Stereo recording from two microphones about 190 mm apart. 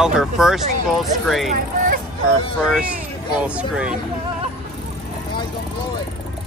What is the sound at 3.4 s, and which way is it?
Speech, 5° right (ahead or behind).